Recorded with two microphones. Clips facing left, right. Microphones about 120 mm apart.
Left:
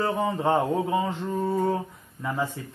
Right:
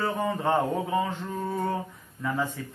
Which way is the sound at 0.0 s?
15° left (ahead or behind).